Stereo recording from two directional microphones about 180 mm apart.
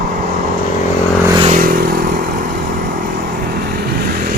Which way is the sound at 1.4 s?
50° right (ahead or behind).